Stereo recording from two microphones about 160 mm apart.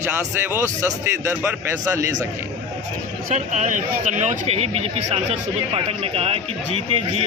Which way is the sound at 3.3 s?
50° right (ahead or behind).